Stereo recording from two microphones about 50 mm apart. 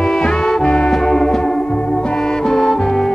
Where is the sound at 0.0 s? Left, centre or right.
Centre.